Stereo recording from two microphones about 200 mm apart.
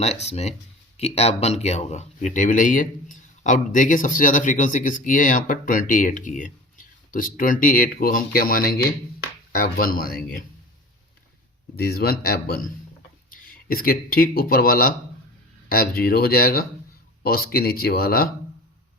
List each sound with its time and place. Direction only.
0.0 s speech: 30° left (ahead or behind); by 10.4 s 50° left (ahead or behind)
11.8 s speech: 50° left (ahead or behind)